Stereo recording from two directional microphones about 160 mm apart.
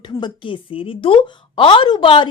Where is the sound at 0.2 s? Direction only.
30° left (ahead or behind).